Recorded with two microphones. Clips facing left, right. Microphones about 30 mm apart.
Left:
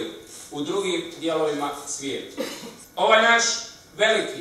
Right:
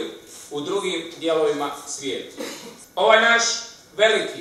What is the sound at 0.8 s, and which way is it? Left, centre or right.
Speech, centre.